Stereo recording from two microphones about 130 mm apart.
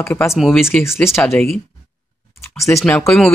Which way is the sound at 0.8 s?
20° left (ahead or behind).